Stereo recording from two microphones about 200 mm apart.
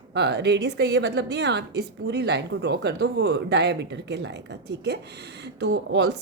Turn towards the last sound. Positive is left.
turn(degrees=-60)  # may be behind; listen again after turning